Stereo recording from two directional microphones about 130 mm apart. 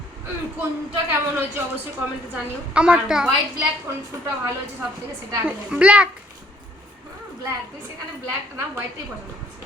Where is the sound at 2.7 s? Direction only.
10° right (ahead or behind).